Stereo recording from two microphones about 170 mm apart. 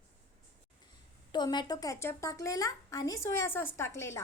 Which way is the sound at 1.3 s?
25° left (ahead or behind).